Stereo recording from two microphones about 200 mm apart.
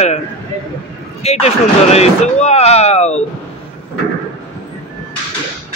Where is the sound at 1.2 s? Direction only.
30° left (ahead or behind).